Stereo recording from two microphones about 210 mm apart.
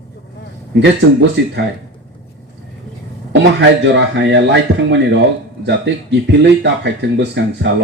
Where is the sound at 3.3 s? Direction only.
55° right (ahead or behind).